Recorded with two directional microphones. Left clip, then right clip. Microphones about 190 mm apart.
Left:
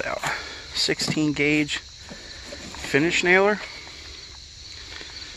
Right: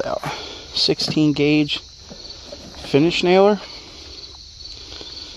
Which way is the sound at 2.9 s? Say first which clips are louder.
Right 3 dB; 65° right (ahead or behind).